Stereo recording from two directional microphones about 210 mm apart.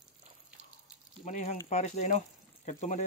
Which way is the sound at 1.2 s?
35° left (ahead or behind).